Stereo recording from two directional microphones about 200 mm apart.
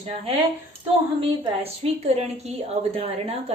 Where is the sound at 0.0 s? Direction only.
30° right (ahead or behind).